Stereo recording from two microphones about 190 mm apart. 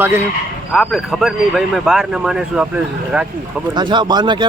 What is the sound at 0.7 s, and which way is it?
Speech, centre (ahead or behind).